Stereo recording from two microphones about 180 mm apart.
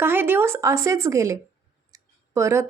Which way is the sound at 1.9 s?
15° right (ahead or behind).